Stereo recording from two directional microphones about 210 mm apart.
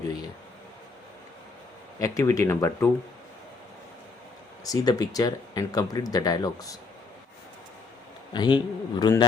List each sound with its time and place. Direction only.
2.0 s speech: 15° left (ahead or behind)
4.6 s speech: 15° left (ahead or behind)
8.3 s a man's voice: 20° left (ahead or behind)